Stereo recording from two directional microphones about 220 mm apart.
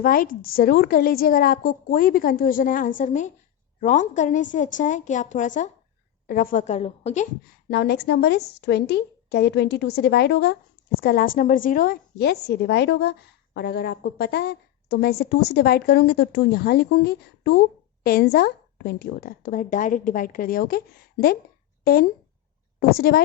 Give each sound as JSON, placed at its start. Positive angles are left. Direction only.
{"t": 0.0, "sound": "a woman's voice", "side_deg": 40}
{"t": 7.7, "sound": "a woman's voice", "side_deg": 50}